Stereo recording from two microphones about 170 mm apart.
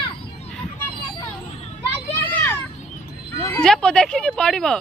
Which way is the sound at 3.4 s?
5° left (ahead or behind).